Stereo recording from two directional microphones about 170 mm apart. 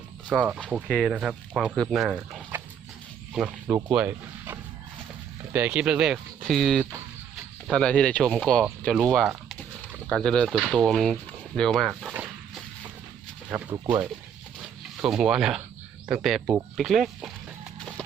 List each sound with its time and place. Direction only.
0.3 s cricket: 10° right (ahead or behind)
0.7 s speech: 5° right (ahead or behind)
10.6 s dog: 5° right (ahead or behind)
13.7 s speech: 20° right (ahead or behind)
15.0 s speech: 5° right (ahead or behind)
16.0 s cricket: 5° right (ahead or behind)
16.7 s speech: centre (ahead or behind)